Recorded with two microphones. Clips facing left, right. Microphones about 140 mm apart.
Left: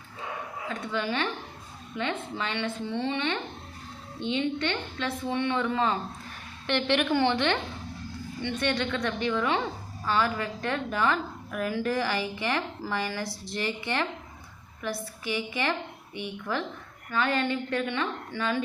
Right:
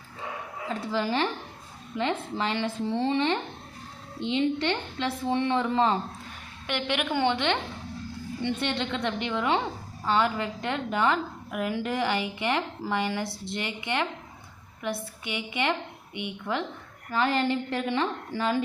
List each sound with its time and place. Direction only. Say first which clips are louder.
0.7 s a woman's voice: right 3 dB; 30° right (ahead or behind)
6.7 s a woman's voice: left 4 dB; 15° right (ahead or behind)
8.6 s a woman's voice: left 5 dB; 20° right (ahead or behind)